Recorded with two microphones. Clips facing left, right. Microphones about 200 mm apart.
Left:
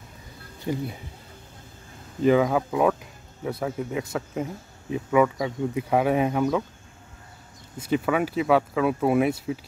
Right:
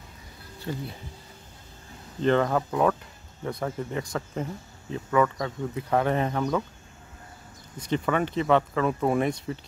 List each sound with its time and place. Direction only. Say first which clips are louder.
0.7 s speech: left 5 dB; 15° left (ahead or behind)
2.2 s speech: left 3 dB; 5° left (ahead or behind)
7.8 s speech: left 2 dB; 5° left (ahead or behind)